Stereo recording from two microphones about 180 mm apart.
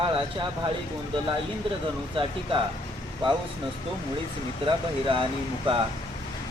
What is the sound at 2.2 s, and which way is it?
Speech, 30° right (ahead or behind).